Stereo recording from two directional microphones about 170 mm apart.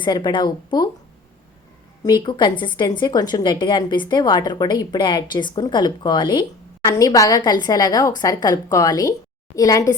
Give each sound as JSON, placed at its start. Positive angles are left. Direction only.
{"t": 0.0, "sound": "a woman's voice", "side_deg": 25}
{"t": 2.0, "sound": "a woman's voice", "side_deg": 25}